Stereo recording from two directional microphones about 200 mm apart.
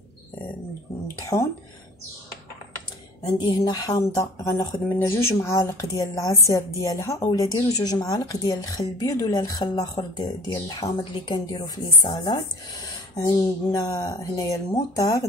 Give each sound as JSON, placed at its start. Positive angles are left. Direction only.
{"t": 1.2, "sound": "speech", "side_deg": 15}
{"t": 3.3, "sound": "speech", "side_deg": 20}